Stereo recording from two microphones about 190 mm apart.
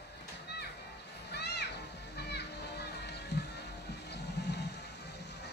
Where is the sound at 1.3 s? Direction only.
60° left (ahead or behind).